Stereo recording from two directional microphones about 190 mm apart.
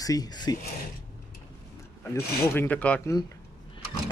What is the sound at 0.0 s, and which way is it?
Speech, 20° left (ahead or behind).